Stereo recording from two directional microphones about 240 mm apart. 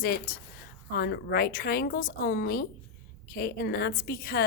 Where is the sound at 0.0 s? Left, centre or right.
Left.